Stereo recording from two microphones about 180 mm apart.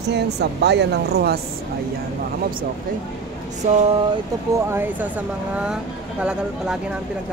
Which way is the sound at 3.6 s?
40° right (ahead or behind).